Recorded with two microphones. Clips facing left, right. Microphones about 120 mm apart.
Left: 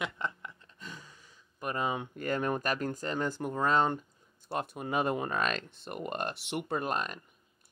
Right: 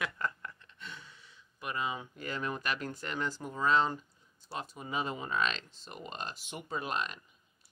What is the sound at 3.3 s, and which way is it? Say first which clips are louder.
Speech: even; 55° left (ahead or behind).